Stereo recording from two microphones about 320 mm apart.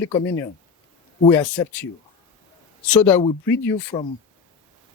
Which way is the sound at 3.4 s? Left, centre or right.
Centre.